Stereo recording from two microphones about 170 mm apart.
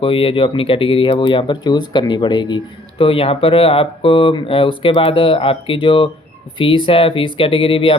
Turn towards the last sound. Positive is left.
turn(degrees=30)  # may be behind; listen again after turning